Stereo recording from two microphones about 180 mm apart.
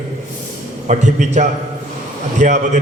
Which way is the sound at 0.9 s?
40° right (ahead or behind).